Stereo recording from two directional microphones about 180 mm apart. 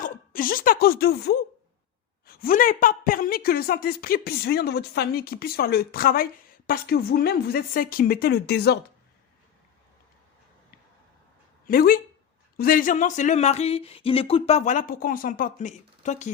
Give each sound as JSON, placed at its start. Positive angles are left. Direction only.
{"t": 0.0, "sound": "a woman's voice", "side_deg": 50}
{"t": 11.6, "sound": "speech", "side_deg": 55}